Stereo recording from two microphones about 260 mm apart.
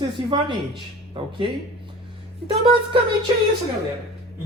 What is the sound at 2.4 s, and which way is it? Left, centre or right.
Speech, right.